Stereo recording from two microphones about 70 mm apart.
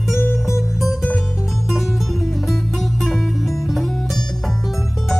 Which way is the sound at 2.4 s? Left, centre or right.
Centre.